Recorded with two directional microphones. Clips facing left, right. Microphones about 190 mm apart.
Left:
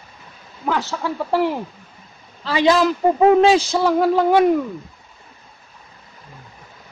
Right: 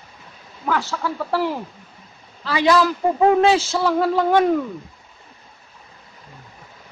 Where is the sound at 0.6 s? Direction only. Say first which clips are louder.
Left 1 dB; 20° left (ahead or behind).